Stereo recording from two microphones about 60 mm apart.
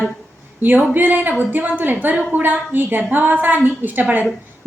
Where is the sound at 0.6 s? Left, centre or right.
Right.